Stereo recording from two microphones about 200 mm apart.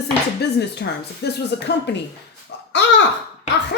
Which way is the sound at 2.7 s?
60° left (ahead or behind).